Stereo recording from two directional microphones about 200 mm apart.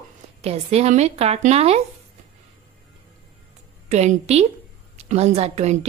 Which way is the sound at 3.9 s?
35° right (ahead or behind).